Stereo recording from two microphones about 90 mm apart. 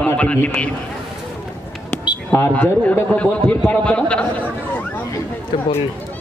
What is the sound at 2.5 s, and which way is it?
A man's voice, 15° left (ahead or behind).